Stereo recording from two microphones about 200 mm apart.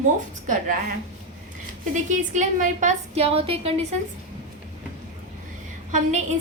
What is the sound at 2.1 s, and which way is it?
A woman's voice, 40° right (ahead or behind).